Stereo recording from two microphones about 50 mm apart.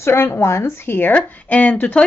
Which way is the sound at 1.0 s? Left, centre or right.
Left.